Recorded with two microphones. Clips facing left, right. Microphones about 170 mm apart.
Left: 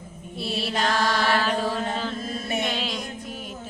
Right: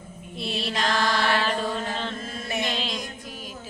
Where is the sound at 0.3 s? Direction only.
5° left (ahead or behind).